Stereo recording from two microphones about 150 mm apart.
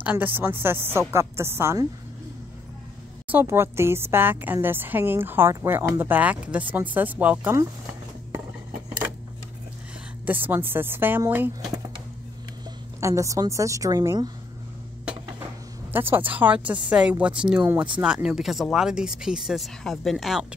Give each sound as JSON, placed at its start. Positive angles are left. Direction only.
{"t": 0.0, "sound": "a woman's voice", "side_deg": -10}
{"t": 3.3, "sound": "a woman's voice", "side_deg": -15}
{"t": 10.2, "sound": "a woman's voice", "side_deg": -10}
{"t": 13.0, "sound": "a woman's voice", "side_deg": -20}
{"t": 15.9, "sound": "a woman's voice", "side_deg": -15}